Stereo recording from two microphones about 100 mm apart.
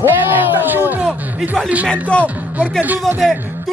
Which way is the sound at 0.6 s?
20° right (ahead or behind).